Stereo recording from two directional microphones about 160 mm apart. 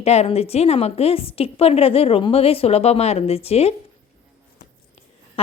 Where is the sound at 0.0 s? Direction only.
40° left (ahead or behind).